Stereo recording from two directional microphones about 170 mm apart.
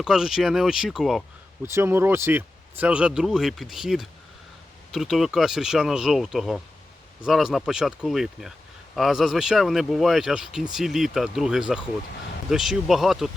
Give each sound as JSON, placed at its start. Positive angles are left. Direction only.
{"t": 0.0, "sound": "speech", "side_deg": -5}
{"t": 1.6, "sound": "speech", "side_deg": -15}